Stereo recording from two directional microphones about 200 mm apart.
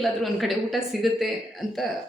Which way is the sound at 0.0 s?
Centre (ahead or behind).